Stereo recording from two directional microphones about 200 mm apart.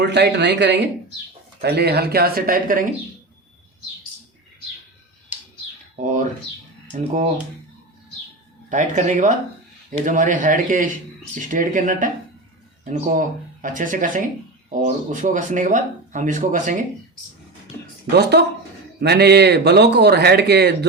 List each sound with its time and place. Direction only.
0.0 s speech: 60° right (ahead or behind)
6.0 s speech: 35° right (ahead or behind)
8.7 s speech: 35° right (ahead or behind)
18.1 s speech: 55° right (ahead or behind)